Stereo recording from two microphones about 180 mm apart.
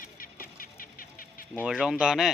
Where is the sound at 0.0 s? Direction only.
50° left (ahead or behind).